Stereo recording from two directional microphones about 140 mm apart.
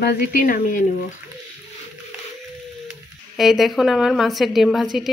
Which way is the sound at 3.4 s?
Centre (ahead or behind).